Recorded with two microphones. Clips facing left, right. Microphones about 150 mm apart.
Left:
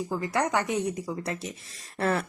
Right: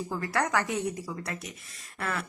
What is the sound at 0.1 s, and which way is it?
Speech, 20° left (ahead or behind).